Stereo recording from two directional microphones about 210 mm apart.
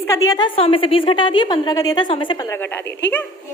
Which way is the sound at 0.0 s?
15° left (ahead or behind).